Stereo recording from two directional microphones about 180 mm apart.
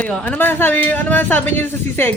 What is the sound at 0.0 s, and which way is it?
Speech, 5° left (ahead or behind).